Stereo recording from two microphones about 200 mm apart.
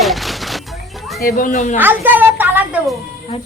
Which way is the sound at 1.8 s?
10° right (ahead or behind).